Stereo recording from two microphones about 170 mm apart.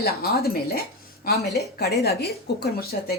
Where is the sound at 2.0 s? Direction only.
70° left (ahead or behind).